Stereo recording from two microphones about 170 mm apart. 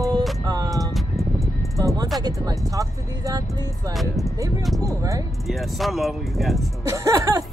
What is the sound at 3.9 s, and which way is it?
Speech, centre (ahead or behind).